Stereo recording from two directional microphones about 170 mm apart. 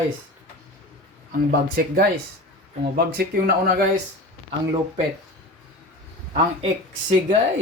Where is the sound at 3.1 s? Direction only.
65° right (ahead or behind).